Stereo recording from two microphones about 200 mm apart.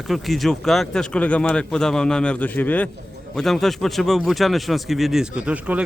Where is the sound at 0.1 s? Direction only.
Centre (ahead or behind).